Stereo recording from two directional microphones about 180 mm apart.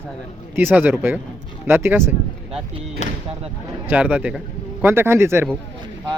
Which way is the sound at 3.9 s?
10° right (ahead or behind).